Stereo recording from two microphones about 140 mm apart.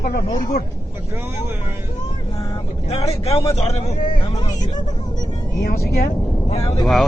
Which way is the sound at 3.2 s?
45° left (ahead or behind).